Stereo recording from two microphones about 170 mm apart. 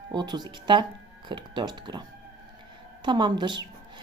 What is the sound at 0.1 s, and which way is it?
Speech, 25° right (ahead or behind).